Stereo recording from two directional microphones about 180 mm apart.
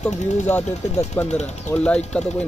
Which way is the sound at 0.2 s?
40° left (ahead or behind).